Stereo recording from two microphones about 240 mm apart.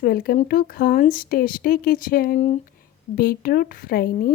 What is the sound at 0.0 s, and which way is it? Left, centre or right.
Speech, left.